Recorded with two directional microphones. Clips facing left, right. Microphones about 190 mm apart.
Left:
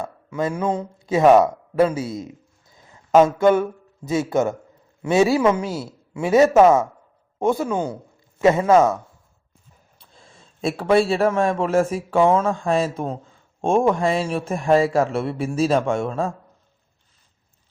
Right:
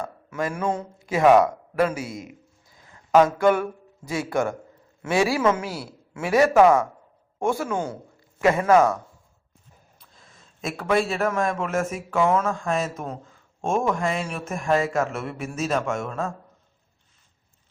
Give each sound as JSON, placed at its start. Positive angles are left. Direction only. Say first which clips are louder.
{"t": 0.3, "sound": "speech", "louder": "left 3 dB", "side_deg": 20}
{"t": 10.0, "sound": "a man's voice", "louder": "left 8 dB", "side_deg": 30}